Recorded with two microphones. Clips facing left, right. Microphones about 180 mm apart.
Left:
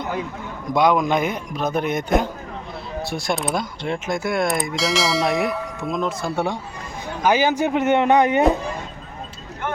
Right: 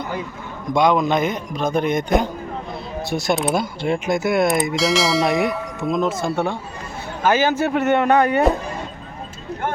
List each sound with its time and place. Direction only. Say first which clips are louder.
0.7 s a man's voice: right 1 dB; 10° left (ahead or behind)
6.3 s a man's voice: right 1 dB; 15° left (ahead or behind)